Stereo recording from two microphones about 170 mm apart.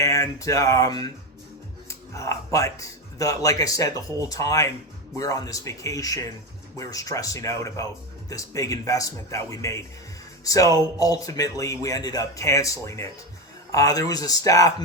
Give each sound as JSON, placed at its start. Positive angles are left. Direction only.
{"t": 0.0, "sound": "speech", "side_deg": 20}